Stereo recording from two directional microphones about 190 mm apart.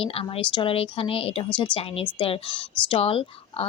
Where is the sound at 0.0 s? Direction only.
30° left (ahead or behind).